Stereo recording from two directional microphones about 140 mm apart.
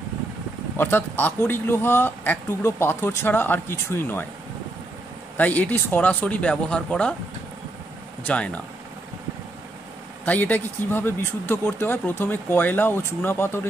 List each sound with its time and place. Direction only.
0.7 s speech: 15° left (ahead or behind)
5.4 s speech: 10° left (ahead or behind)
8.3 s speech: 10° left (ahead or behind)
10.2 s speech: 10° left (ahead or behind)